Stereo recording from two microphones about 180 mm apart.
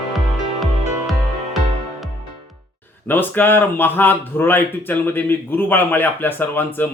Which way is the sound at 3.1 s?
10° left (ahead or behind).